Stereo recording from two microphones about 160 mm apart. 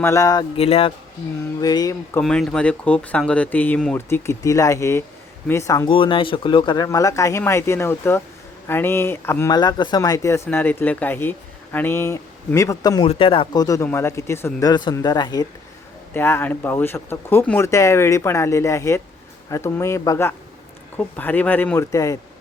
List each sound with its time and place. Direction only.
0.0 s speech: 20° left (ahead or behind)
0.5 s speech: 40° left (ahead or behind)
1.6 s speech: 25° left (ahead or behind)
2.2 s speech: centre (ahead or behind)
4.1 s speech: 20° left (ahead or behind)
5.9 s speech: 30° left (ahead or behind); by 9.6 s 15° left (ahead or behind)
9.6 s speech: 25° left (ahead or behind)
13.1 s speech: 35° left (ahead or behind)
16.1 s speech: 15° left (ahead or behind)